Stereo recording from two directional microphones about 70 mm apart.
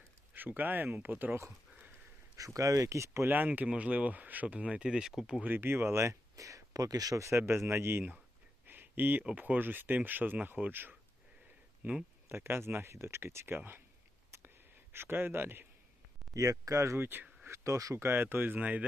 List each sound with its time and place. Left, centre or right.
0.3 s speech: right
2.3 s speech: right
3.2 s speech: right; by 5.4 s centre
5.4 s speech: right
8.6 s a sound: right
9.2 s speech: right
14.3 s a sound: right
14.9 s speech: right
16.3 s speech: right
18.1 s speech: right